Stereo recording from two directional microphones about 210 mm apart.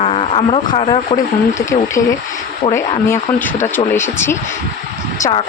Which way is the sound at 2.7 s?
15° left (ahead or behind).